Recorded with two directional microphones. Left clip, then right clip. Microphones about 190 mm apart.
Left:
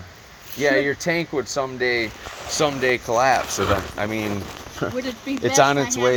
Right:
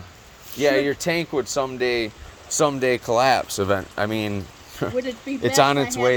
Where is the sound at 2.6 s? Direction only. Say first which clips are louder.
Even; 30° right (ahead or behind).